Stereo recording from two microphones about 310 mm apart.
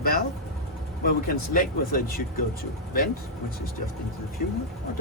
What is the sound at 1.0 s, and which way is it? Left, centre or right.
Speech, left.